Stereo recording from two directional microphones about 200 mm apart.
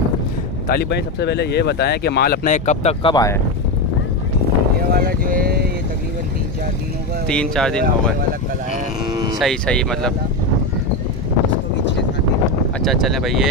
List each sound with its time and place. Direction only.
0.7 s speech: 55° left (ahead or behind); by 3.3 s 20° left (ahead or behind)
4.9 s speech: 45° right (ahead or behind)
7.2 s speech: 5° left (ahead or behind)
9.4 s speech: 5° left (ahead or behind)
12.8 s speech: centre (ahead or behind)